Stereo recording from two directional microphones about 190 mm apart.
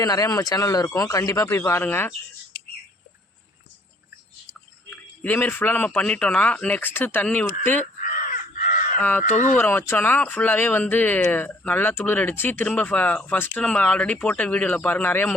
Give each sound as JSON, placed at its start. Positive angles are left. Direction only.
{"t": 0.0, "sound": "speech", "side_deg": 20}
{"t": 4.9, "sound": "speech", "side_deg": 10}
{"t": 8.0, "sound": "crow", "side_deg": 45}
{"t": 9.0, "sound": "speech", "side_deg": 10}
{"t": 9.2, "sound": "speech", "side_deg": 40}
{"t": 9.6, "sound": "speech", "side_deg": 10}